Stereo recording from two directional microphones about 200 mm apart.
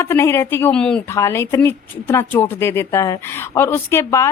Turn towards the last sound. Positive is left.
turn(degrees=15)  # may be behind; listen again after turning